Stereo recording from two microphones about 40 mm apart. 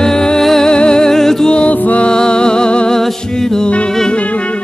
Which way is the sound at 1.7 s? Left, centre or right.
Left.